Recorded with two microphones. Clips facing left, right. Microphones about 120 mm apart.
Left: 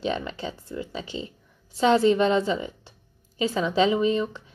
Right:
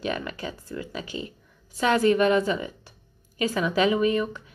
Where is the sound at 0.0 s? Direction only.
25° left (ahead or behind).